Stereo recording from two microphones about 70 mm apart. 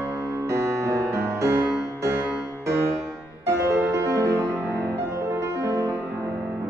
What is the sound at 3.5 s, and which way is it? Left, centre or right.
Music, right.